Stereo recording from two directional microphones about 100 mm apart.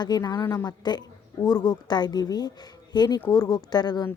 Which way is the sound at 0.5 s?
40° left (ahead or behind).